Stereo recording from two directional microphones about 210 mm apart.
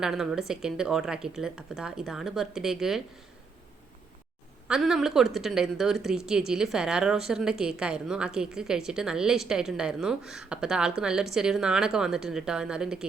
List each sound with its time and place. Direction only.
0.0 s a woman's voice: centre (ahead or behind)
4.7 s a woman's voice: centre (ahead or behind)